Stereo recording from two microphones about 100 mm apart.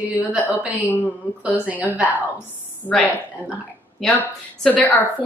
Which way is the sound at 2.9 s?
10° left (ahead or behind).